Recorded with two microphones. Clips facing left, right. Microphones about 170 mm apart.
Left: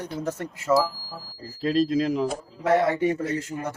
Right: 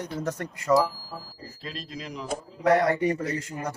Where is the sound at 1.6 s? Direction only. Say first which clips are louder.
Left 17 dB; 75° left (ahead or behind).